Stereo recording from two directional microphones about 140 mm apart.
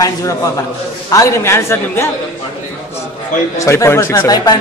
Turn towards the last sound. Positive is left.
turn(degrees=30)  # may be behind; listen again after turning